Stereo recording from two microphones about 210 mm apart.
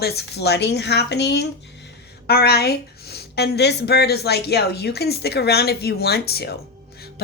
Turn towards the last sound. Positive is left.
turn(degrees=50)  # may be behind; listen again after turning